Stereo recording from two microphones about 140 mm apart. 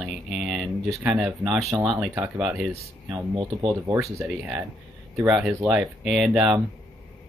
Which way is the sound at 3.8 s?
20° right (ahead or behind).